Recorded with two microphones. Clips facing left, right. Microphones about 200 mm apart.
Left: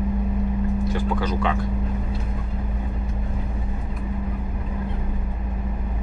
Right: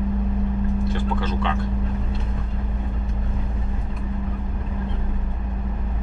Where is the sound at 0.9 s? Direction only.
10° left (ahead or behind).